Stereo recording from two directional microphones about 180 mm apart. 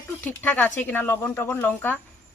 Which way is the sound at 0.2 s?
10° left (ahead or behind).